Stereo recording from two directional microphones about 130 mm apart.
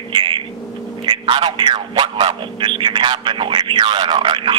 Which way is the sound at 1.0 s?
40° right (ahead or behind).